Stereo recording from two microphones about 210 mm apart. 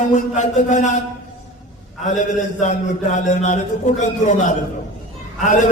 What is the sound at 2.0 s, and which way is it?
A man's voice, 35° left (ahead or behind).